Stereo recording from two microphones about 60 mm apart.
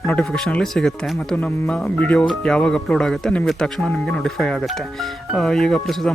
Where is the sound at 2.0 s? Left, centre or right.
Left.